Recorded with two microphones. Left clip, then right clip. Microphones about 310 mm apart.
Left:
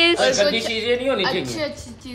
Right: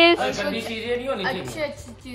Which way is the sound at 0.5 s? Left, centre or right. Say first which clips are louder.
Left 6 dB; left.